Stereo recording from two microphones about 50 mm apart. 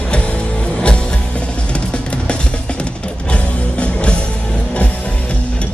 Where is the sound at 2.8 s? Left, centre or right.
Left.